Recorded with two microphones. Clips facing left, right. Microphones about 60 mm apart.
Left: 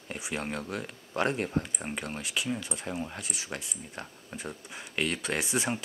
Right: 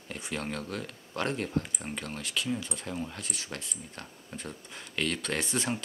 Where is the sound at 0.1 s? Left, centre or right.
Centre.